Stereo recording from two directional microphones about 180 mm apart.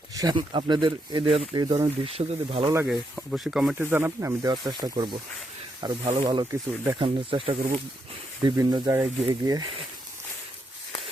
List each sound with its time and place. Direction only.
0.1 s speech: 20° right (ahead or behind)
2.7 s speech: 5° right (ahead or behind)
4.5 s speech: 25° right (ahead or behind)